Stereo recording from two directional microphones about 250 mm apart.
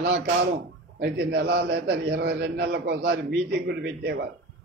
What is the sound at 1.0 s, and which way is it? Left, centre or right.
A man's voice, right.